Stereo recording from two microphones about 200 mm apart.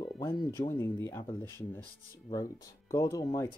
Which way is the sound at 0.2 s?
15° left (ahead or behind).